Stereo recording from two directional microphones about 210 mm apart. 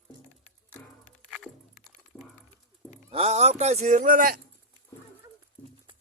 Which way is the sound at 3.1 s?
30° right (ahead or behind).